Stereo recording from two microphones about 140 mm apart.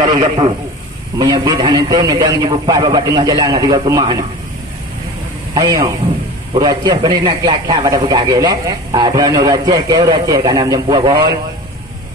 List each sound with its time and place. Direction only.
0.0 s a man's voice: 35° right (ahead or behind)
5.5 s a man's voice: 25° right (ahead or behind)